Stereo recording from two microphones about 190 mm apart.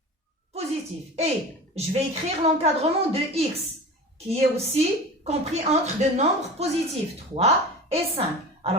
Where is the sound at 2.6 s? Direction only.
30° right (ahead or behind).